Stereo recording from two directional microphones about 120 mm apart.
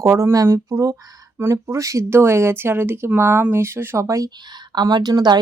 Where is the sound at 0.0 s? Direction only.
25° right (ahead or behind).